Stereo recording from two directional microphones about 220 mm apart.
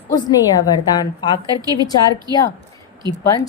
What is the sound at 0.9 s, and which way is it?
Speech, 20° left (ahead or behind).